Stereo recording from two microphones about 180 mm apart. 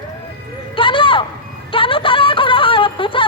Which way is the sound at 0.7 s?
30° left (ahead or behind).